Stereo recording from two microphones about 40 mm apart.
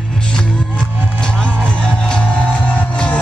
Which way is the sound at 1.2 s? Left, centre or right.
Left.